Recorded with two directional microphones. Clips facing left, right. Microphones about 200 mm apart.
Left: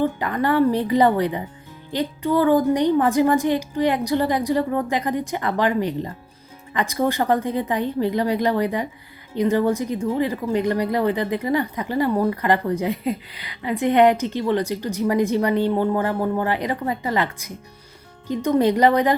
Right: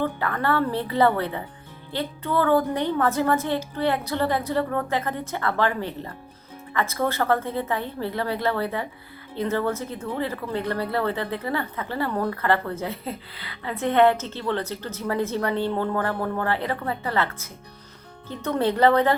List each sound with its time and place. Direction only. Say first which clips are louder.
0.0 s speech: left 4 dB; 15° left (ahead or behind)